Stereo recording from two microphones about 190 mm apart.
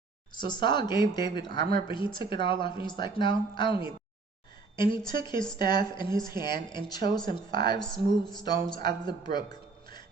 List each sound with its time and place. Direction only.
0.3 s speech: 25° left (ahead or behind)
7.8 s speech: 5° left (ahead or behind)
8.4 s speech: 20° left (ahead or behind)